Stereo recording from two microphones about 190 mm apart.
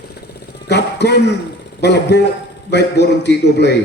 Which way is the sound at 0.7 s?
60° left (ahead or behind).